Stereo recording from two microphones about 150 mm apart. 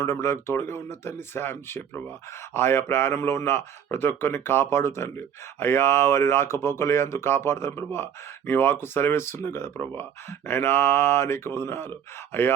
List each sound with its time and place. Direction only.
0.0 s speech: 20° left (ahead or behind)